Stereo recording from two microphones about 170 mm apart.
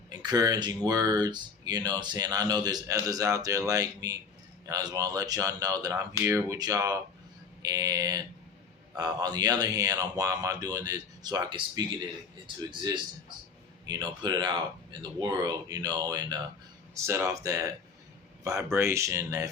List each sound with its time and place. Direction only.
0.1 s speech: 25° right (ahead or behind)